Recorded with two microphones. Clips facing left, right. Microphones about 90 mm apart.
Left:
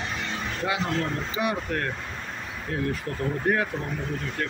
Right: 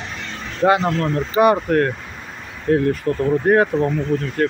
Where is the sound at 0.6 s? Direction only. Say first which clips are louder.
Right 11 dB; 55° right (ahead or behind).